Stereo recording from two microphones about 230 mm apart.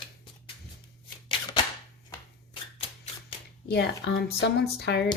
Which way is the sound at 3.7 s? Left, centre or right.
Left.